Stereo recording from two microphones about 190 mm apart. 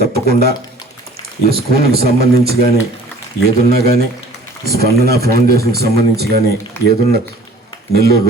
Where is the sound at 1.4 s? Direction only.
55° right (ahead or behind).